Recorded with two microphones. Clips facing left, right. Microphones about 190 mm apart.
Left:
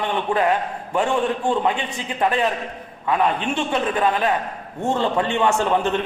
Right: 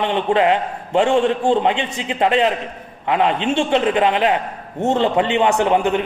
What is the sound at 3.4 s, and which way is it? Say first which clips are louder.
A man's voice: right 5 dB; 25° right (ahead or behind).